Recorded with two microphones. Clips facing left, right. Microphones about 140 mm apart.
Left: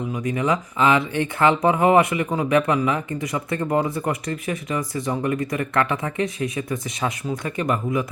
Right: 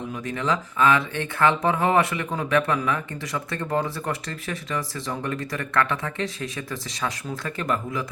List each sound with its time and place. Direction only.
0.2 s speech: 20° left (ahead or behind)